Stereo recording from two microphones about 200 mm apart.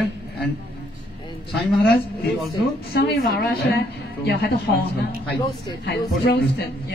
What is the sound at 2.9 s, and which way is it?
Speech, 50° left (ahead or behind).